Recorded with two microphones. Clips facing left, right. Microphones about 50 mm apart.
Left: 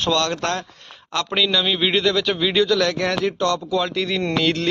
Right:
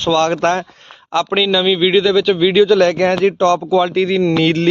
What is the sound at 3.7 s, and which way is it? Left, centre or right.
Speech, centre.